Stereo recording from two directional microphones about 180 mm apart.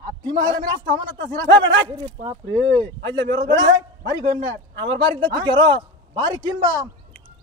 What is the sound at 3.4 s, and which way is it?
Speech, 25° right (ahead or behind).